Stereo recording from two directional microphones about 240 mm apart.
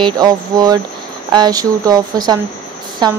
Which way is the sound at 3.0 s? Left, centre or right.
Centre.